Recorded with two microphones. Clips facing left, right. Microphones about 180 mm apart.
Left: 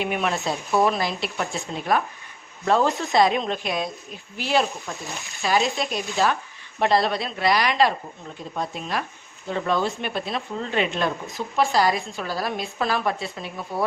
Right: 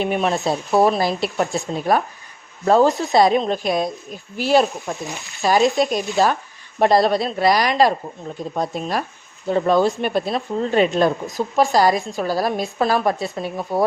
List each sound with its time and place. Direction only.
0.0 s speech: 35° right (ahead or behind)